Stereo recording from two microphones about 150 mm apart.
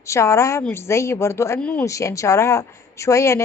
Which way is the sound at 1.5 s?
5° left (ahead or behind).